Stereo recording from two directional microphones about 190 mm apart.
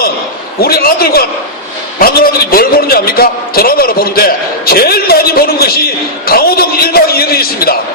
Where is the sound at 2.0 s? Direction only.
50° left (ahead or behind).